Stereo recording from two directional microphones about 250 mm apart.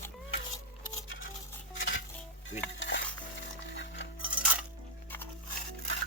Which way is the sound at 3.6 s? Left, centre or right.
Left.